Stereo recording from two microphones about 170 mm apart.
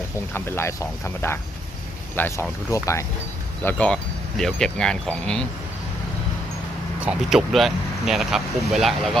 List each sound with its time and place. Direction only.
0.3 s speech: 15° left (ahead or behind)
7.0 s speech: 5° right (ahead or behind)